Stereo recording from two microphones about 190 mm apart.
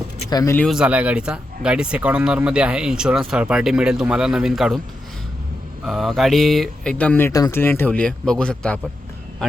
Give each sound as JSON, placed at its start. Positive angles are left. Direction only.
{"t": 0.3, "sound": "speech", "side_deg": 20}
{"t": 0.5, "sound": "speech", "side_deg": 0}
{"t": 5.8, "sound": "speech", "side_deg": 0}